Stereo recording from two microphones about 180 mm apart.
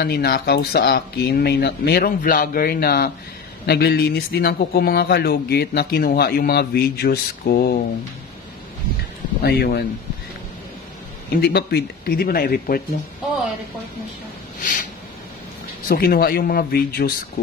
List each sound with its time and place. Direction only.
0.0 s speech: 60° left (ahead or behind)
9.4 s speech: 65° left (ahead or behind)
11.3 s speech: 60° left (ahead or behind)
14.6 s a sound: 45° left (ahead or behind)
15.9 s speech: 55° left (ahead or behind)